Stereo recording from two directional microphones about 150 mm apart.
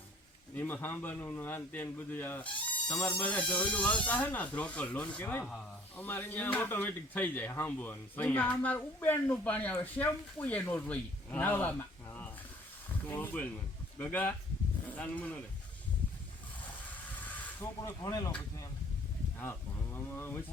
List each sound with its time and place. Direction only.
0.5 s speech: 10° left (ahead or behind)
17.2 s snake: 10° left (ahead or behind)
18.0 s speech: 25° left (ahead or behind)
19.4 s a sound: 15° left (ahead or behind)